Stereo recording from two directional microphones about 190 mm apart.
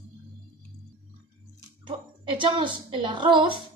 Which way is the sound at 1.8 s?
25° right (ahead or behind).